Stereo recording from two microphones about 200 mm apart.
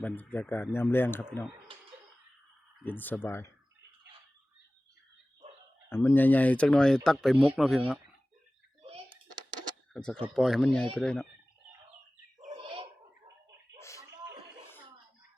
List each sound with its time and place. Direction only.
0.0 s speech: 10° left (ahead or behind)
2.8 s speech: 10° left (ahead or behind)
5.9 s speech: 10° left (ahead or behind)
9.9 s speech: 5° left (ahead or behind)
12.5 s a sound: 25° right (ahead or behind)
13.7 s slap: 15° left (ahead or behind)